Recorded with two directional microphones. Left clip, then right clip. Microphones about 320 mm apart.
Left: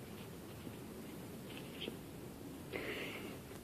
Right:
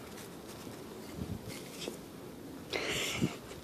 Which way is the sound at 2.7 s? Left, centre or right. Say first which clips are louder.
Right 9 dB; centre.